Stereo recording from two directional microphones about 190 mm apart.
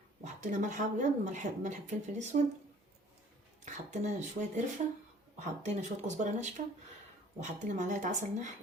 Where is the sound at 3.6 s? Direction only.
40° right (ahead or behind).